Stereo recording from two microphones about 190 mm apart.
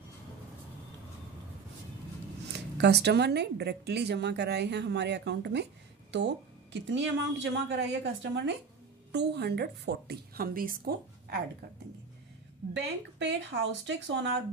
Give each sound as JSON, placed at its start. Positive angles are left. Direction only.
{"t": 2.8, "sound": "a woman's voice", "side_deg": -60}
{"t": 12.7, "sound": "speech", "side_deg": -65}